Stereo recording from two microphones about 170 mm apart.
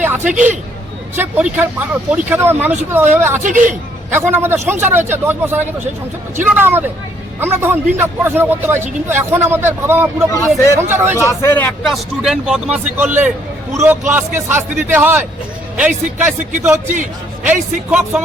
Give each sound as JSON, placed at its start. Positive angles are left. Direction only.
{"t": 0.0, "sound": "speech", "side_deg": -10}
{"t": 3.4, "sound": "speech", "side_deg": -50}
{"t": 4.1, "sound": "speech", "side_deg": -15}
{"t": 11.2, "sound": "speech", "side_deg": 15}
{"t": 11.8, "sound": "speech", "side_deg": 0}
{"t": 16.9, "sound": "a man's voice", "side_deg": -50}
{"t": 17.5, "sound": "speech", "side_deg": -10}